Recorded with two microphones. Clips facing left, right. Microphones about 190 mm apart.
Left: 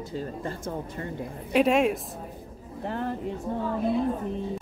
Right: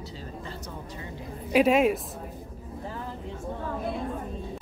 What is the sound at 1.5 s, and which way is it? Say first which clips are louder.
Speech: right 1 dB; centre (ahead or behind).